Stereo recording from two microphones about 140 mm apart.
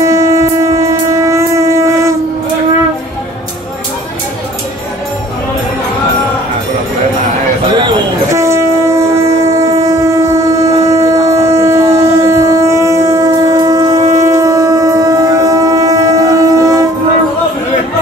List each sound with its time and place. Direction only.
0.0 s train: 20° right (ahead or behind)
8.3 s train: 20° right (ahead or behind)
14.1 s shofar: 20° right (ahead or behind)